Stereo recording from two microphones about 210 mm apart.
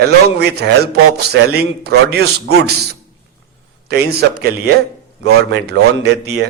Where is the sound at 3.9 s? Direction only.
50° right (ahead or behind).